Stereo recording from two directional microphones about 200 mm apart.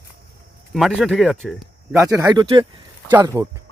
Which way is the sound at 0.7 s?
Centre (ahead or behind).